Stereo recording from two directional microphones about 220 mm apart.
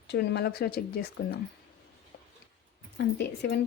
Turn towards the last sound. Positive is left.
turn(degrees=50)  # may be behind; listen again after turning